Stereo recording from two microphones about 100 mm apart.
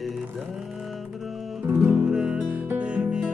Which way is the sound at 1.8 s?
10° right (ahead or behind).